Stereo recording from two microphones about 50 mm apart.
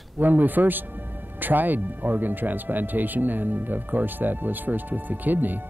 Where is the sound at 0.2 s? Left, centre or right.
Right.